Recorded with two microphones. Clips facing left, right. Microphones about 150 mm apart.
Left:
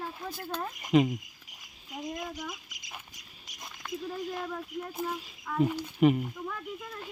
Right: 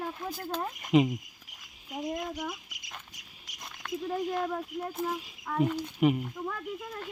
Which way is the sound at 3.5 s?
90° right.